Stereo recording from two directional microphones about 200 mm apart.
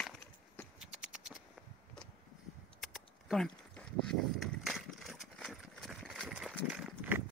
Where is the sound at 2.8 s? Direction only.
Centre (ahead or behind).